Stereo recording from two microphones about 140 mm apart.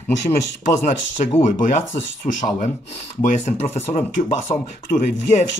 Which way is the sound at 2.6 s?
50° left (ahead or behind).